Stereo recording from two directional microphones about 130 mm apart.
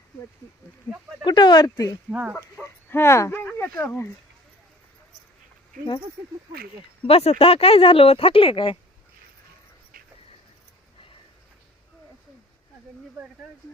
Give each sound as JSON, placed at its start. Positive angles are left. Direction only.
{"t": 1.2, "sound": "speech", "side_deg": 35}
{"t": 2.0, "sound": "speech", "side_deg": -10}
{"t": 2.3, "sound": "speech", "side_deg": 15}
{"t": 7.1, "sound": "speech", "side_deg": 50}